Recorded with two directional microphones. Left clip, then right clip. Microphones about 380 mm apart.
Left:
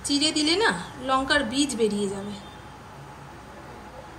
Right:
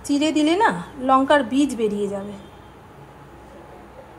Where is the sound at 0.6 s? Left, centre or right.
Centre.